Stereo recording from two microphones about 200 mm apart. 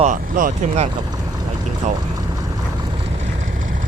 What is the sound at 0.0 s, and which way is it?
Speech, 40° right (ahead or behind).